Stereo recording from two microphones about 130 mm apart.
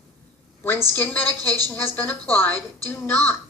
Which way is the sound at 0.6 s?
15° left (ahead or behind).